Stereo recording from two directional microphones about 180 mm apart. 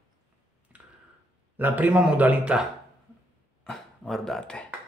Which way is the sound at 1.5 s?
10° right (ahead or behind).